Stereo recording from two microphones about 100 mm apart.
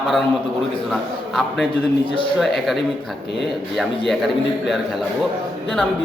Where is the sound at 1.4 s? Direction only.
Centre (ahead or behind).